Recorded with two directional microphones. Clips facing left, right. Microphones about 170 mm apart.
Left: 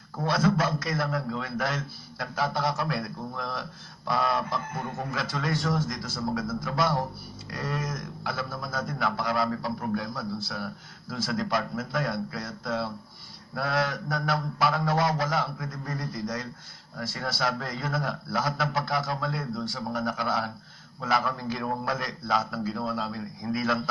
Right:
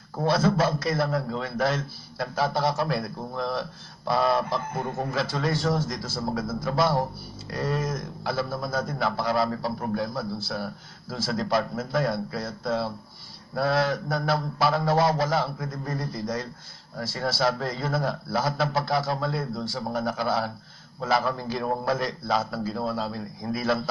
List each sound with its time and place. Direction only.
0.3 s a man's voice: 30° right (ahead or behind)